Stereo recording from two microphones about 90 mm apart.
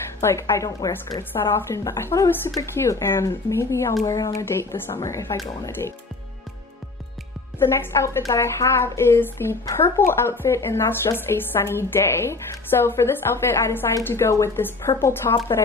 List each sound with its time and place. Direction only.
0.2 s speech: 30° left (ahead or behind)
0.7 s speech: 50° left (ahead or behind)
1.5 s a woman's voice: 30° left (ahead or behind)
7.5 s a woman's voice: 30° left (ahead or behind)